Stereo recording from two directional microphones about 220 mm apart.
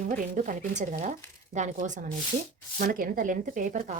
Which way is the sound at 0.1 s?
35° right (ahead or behind).